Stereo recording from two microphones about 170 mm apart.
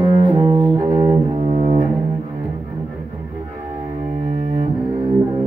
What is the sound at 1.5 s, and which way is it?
Double bass, 40° right (ahead or behind).